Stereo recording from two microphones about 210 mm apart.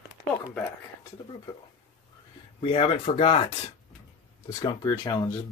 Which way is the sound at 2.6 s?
25° left (ahead or behind).